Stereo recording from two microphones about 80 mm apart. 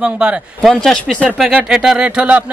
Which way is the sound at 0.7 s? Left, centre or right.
Centre.